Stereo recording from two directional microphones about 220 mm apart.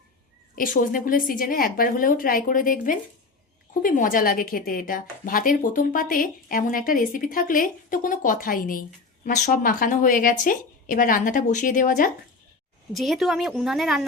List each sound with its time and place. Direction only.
0.5 s speech: 40° left (ahead or behind)
12.9 s a woman's voice: centre (ahead or behind)